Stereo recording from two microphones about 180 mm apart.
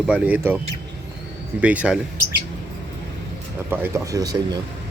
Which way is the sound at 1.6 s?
5° right (ahead or behind).